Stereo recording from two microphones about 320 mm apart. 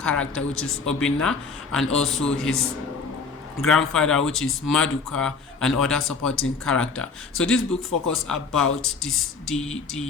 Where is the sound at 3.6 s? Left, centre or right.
Centre.